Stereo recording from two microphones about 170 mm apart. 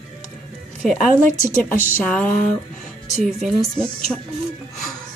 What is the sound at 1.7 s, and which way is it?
Speech, 50° left (ahead or behind).